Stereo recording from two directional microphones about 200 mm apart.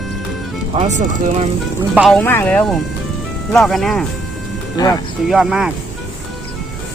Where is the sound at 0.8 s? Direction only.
35° right (ahead or behind).